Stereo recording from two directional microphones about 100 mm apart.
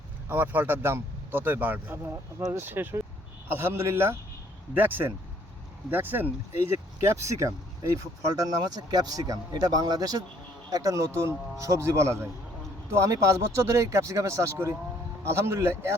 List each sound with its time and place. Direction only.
0.3 s a man's voice: 20° right (ahead or behind)